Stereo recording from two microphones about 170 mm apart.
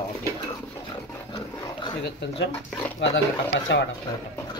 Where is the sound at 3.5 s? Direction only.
90° left.